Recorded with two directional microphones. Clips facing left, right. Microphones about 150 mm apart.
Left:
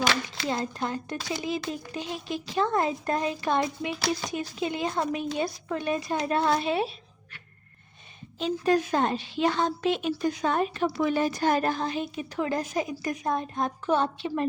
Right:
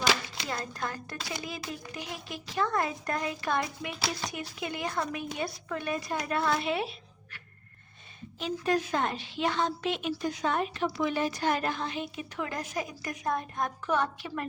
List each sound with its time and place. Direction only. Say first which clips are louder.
0.4 s a woman's voice: left 6 dB; 25° left (ahead or behind)
8.4 s a woman's voice: left 5 dB; 35° left (ahead or behind)